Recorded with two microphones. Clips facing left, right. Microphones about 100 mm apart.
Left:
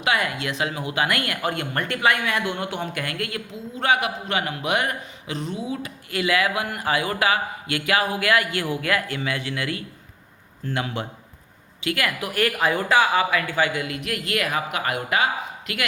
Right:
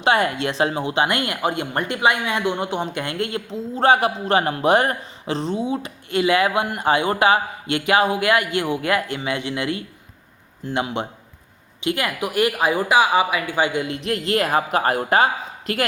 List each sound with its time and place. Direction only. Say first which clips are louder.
0.0 s speech: right 5 dB; 30° right (ahead or behind)